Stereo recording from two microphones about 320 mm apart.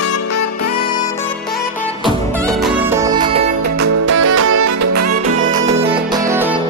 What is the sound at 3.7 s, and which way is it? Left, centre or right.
Music, right.